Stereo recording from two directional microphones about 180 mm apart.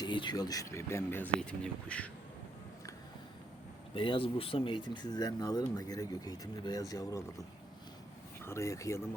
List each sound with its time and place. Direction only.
0.0 s speech: 25° left (ahead or behind); by 2.0 s 5° left (ahead or behind)
3.9 s speech: 30° left (ahead or behind)
8.4 s speech: 15° left (ahead or behind)